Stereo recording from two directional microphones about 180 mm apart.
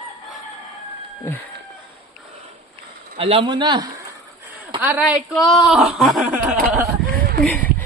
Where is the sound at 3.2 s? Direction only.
30° right (ahead or behind).